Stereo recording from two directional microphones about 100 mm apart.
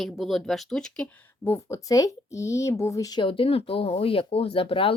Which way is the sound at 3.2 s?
65° left (ahead or behind).